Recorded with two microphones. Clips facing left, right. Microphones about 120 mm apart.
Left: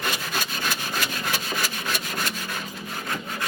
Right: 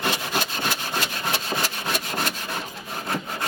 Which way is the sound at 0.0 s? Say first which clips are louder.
Right 3 dB; 25° right (ahead or behind).